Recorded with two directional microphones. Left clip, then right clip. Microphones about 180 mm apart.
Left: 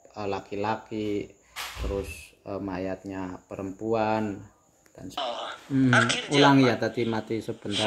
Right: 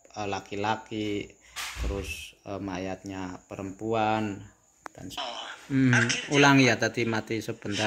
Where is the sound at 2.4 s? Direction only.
Centre (ahead or behind).